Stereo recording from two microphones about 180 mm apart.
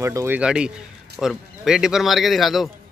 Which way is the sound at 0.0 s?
15° right (ahead or behind).